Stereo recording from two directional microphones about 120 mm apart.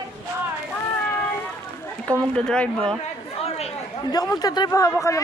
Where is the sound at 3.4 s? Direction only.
60° left (ahead or behind).